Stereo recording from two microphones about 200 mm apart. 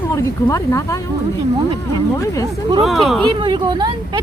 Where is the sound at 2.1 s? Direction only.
15° left (ahead or behind).